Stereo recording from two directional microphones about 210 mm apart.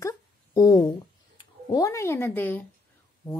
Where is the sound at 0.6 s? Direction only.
20° left (ahead or behind).